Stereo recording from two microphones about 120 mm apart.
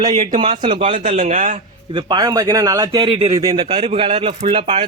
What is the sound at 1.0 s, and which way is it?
Speech, 75° right (ahead or behind).